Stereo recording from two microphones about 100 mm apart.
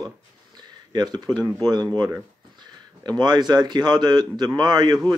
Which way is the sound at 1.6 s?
45° right (ahead or behind).